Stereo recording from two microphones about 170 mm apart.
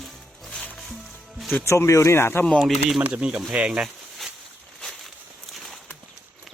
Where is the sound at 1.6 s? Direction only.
15° left (ahead or behind).